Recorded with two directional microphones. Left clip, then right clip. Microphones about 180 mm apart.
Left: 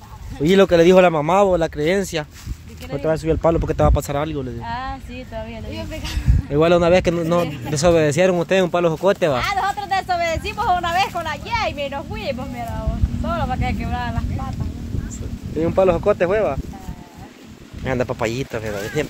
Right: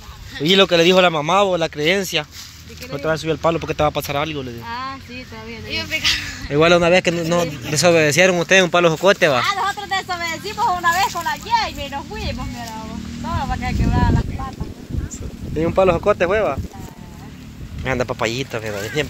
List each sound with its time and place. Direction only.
0.4 s speech: 20° left (ahead or behind)
6.5 s speech: 5° left (ahead or behind)
9.6 s speech: 35° left (ahead or behind)
15.6 s speech: centre (ahead or behind)
17.8 s speech: 15° left (ahead or behind)